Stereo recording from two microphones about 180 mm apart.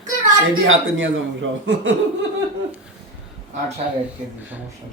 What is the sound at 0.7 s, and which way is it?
Speech, 90° right.